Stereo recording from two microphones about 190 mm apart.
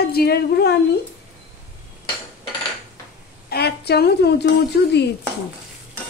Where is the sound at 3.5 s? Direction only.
55° left (ahead or behind).